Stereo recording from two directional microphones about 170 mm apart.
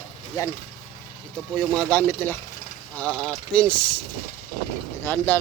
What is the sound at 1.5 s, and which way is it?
Speech, 10° left (ahead or behind).